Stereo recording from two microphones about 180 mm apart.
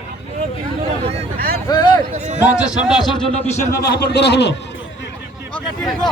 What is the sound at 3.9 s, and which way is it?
Speech, 65° left (ahead or behind).